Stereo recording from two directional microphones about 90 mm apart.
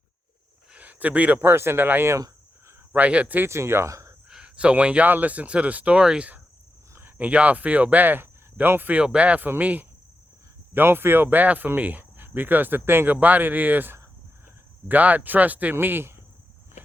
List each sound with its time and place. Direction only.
0.7 s speech: 15° right (ahead or behind)
3.5 s speech: 30° right (ahead or behind)
4.3 s speech: 10° right (ahead or behind)